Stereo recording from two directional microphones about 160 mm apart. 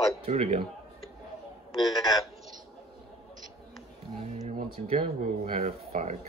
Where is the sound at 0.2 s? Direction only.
40° right (ahead or behind).